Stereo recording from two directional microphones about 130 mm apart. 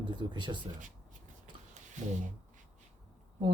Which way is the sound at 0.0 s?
35° right (ahead or behind).